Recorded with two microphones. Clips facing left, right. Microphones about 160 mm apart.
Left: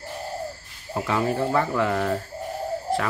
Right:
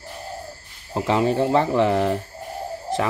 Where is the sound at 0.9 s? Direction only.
25° right (ahead or behind).